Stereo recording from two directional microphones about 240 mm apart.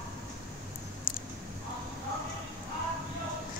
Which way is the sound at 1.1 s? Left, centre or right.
Left.